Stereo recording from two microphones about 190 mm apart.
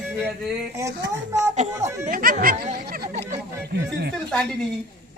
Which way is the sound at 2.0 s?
45° right (ahead or behind).